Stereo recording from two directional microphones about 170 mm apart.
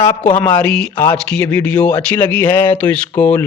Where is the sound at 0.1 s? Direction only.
10° left (ahead or behind).